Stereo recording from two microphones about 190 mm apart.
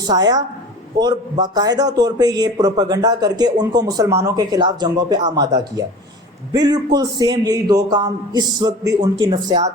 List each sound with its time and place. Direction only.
0.1 s speech: 20° right (ahead or behind)